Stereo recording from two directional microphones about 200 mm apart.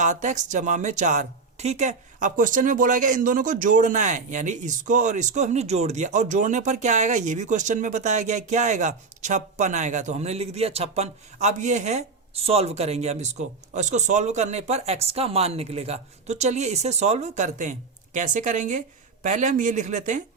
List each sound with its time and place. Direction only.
0.0 s speech: 35° right (ahead or behind)